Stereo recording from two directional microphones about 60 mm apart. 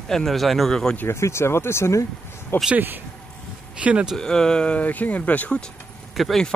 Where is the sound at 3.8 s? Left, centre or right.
Right.